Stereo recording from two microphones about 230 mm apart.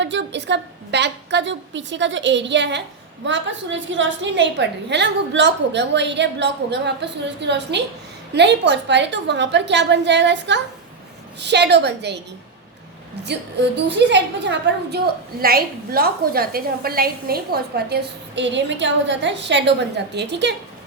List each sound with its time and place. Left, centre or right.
0.0 s a woman's voice: right
13.2 s a woman's voice: right